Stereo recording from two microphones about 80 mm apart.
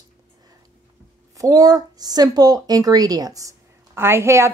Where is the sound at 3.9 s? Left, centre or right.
Right.